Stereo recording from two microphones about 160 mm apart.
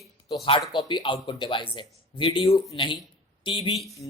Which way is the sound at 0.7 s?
30° left (ahead or behind).